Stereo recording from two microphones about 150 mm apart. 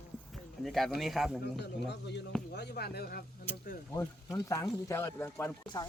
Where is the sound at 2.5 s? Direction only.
90° left.